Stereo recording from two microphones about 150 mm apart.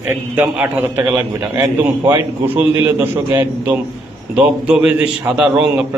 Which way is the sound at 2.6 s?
25° right (ahead or behind).